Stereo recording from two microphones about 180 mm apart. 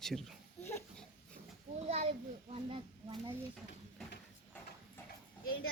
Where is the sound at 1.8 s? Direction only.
35° right (ahead or behind).